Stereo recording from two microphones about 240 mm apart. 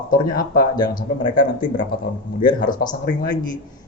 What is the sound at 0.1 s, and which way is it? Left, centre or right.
Speech, left.